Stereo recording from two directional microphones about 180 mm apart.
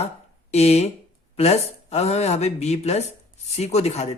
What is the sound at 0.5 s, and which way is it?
Speech, 35° left (ahead or behind).